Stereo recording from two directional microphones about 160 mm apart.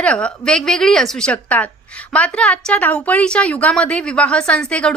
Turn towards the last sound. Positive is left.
turn(degrees=5)  # may be behind; listen again after turning